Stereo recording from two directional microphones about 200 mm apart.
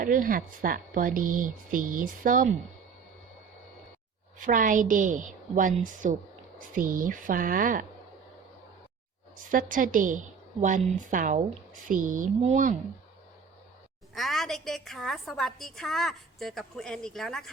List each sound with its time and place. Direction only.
0.0 s speech: 45° right (ahead or behind)
4.4 s a woman's voice: 40° right (ahead or behind)
9.5 s a woman's voice: 40° right (ahead or behind)
14.1 s a woman's voice: centre (ahead or behind)